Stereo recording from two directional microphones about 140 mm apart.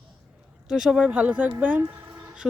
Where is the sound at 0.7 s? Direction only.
5° right (ahead or behind).